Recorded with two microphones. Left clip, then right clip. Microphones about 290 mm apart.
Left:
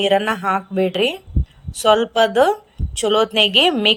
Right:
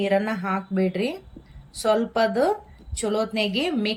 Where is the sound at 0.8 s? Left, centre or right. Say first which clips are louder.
Left 7 dB; left.